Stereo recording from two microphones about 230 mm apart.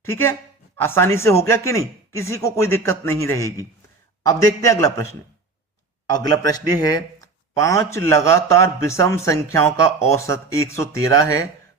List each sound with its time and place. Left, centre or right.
0.0 s a man's voice: centre
6.1 s a man's voice: centre